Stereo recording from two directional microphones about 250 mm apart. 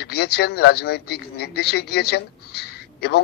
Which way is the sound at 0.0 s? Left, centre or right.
Left.